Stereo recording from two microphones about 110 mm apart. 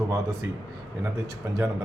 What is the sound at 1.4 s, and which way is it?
Speech, 25° right (ahead or behind).